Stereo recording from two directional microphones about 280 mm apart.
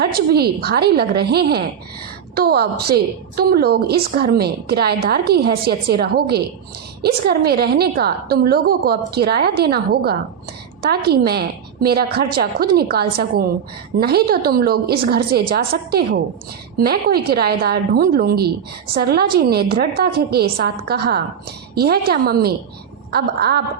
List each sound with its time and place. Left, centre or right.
0.0 s a woman's voice: right